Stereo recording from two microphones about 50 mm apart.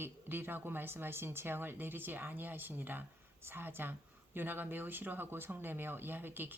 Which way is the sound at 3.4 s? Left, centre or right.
Right.